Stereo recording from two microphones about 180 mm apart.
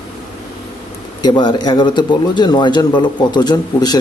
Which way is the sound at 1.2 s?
25° left (ahead or behind).